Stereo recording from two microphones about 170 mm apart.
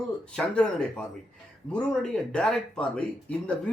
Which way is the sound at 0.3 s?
5° left (ahead or behind).